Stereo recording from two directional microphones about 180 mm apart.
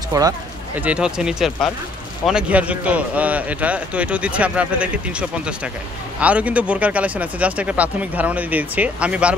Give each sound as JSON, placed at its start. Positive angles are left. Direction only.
{"t": 0.1, "sound": "speech", "side_deg": -20}
{"t": 0.7, "sound": "speech", "side_deg": -5}
{"t": 6.1, "sound": "speech", "side_deg": -5}